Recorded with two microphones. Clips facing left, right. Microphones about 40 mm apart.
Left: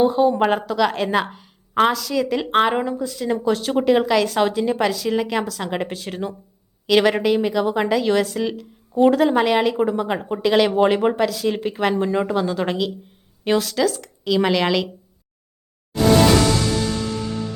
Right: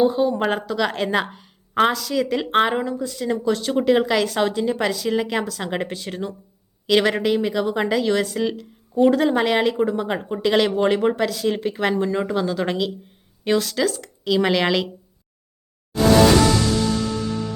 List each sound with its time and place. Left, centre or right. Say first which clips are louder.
0.0 s a woman's voice: left 2 dB; centre
3.2 s a woman's voice: left 1 dB; centre
9.7 s a woman's voice: left 1 dB; centre
10.7 s a woman's voice: left 2 dB; centre
11.9 s speech: left 1 dB; centre
12.2 s a woman's voice: left 1 dB; centre